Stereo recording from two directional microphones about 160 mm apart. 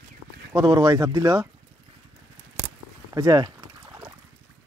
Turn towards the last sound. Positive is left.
turn(degrees=-25)  # may be behind; listen again after turning